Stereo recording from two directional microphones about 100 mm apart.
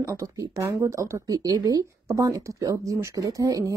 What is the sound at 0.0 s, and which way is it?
Speech, 30° right (ahead or behind).